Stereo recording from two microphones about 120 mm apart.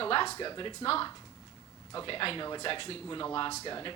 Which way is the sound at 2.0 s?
45° left (ahead or behind).